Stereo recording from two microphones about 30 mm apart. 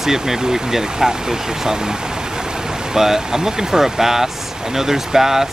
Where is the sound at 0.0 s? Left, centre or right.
Centre.